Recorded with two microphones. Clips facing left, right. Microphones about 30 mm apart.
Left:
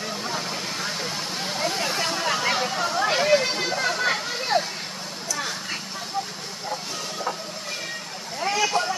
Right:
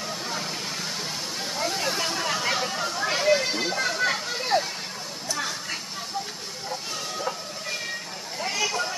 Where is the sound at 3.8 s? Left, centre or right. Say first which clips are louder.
Left 2 dB; centre.